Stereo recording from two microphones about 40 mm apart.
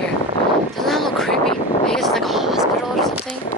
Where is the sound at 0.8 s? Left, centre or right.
Centre.